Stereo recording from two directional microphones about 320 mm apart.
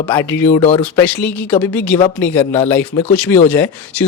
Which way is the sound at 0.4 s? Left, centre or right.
Centre.